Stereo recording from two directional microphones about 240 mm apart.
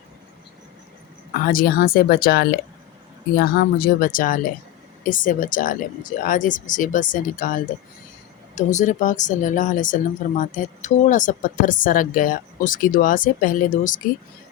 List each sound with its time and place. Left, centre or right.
1.3 s speech: left